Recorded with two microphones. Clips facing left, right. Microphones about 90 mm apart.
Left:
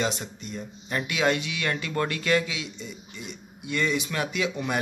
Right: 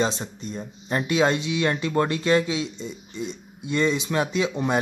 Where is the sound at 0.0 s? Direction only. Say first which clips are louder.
Right 4 dB; 30° right (ahead or behind).